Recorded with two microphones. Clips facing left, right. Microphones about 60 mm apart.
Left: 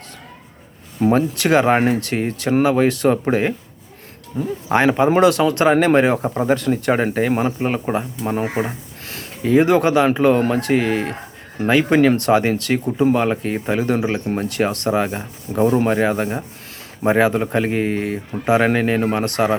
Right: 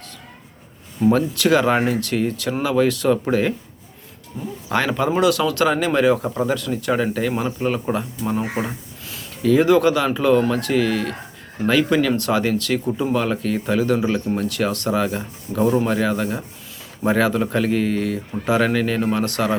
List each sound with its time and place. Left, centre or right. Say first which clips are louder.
1.1 s speech: left 2 dB; left
4.7 s speech: left 5 dB; left